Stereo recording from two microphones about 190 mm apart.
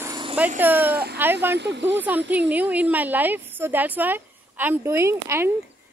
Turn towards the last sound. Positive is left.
turn(degrees=-15)  # may be behind; listen again after turning